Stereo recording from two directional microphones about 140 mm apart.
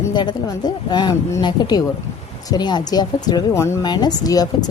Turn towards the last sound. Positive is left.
turn(degrees=25)  # may be behind; listen again after turning